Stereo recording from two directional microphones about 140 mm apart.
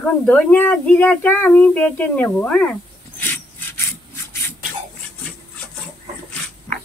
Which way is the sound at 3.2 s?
15° left (ahead or behind).